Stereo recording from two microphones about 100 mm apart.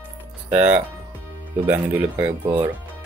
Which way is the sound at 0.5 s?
15° right (ahead or behind).